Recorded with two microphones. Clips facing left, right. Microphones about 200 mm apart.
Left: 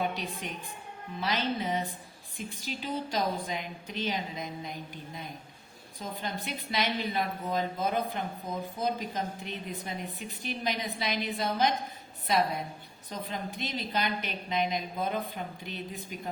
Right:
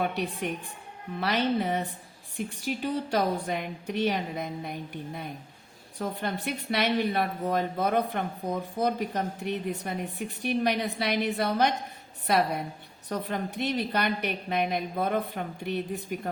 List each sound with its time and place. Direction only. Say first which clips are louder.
0.0 s a woman's voice: right 4 dB; 60° right (ahead or behind)